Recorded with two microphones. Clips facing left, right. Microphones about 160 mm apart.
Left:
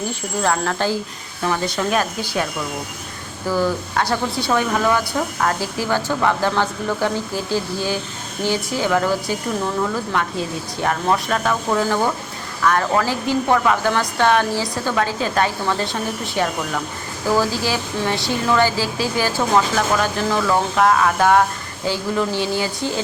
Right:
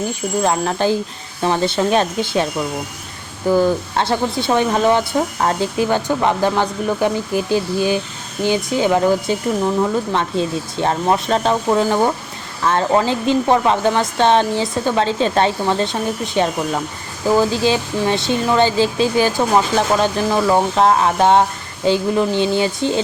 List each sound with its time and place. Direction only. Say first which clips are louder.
0.4 s speech: right 2 dB; 20° right (ahead or behind)
3.5 s speech: right 5 dB; 25° right (ahead or behind)